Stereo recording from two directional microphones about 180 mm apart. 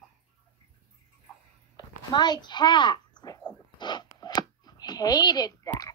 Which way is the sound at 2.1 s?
25° left (ahead or behind).